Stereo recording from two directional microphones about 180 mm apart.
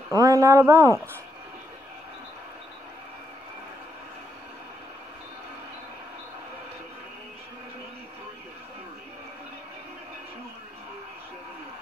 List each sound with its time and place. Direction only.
0.1 s speech: 20° right (ahead or behind)